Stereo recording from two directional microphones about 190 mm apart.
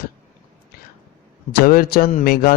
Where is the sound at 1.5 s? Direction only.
50° left (ahead or behind).